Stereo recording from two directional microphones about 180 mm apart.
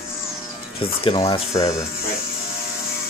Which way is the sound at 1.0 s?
30° left (ahead or behind).